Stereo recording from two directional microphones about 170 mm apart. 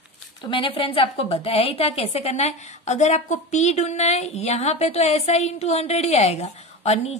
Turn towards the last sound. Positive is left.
turn(degrees=40)  # may be behind; listen again after turning